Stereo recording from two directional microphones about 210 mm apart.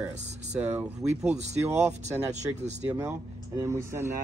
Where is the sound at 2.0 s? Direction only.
35° right (ahead or behind).